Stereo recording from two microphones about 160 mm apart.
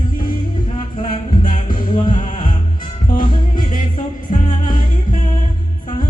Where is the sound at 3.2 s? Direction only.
55° left (ahead or behind).